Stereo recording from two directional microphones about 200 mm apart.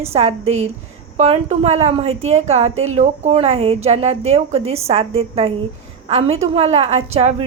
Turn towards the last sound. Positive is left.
turn(degrees=-30)  # may be behind; listen again after turning